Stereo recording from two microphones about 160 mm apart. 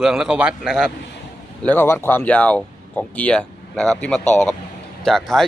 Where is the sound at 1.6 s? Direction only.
10° left (ahead or behind).